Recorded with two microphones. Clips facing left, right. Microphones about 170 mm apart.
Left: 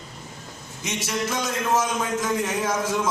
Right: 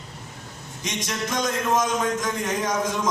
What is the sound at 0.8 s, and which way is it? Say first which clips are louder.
A man's voice: left 2 dB; 5° left (ahead or behind).